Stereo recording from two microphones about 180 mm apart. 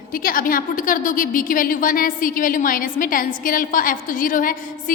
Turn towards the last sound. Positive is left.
turn(degrees=50)  # may be behind; listen again after turning